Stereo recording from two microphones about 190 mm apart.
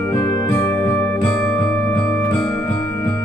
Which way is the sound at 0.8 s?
10° left (ahead or behind).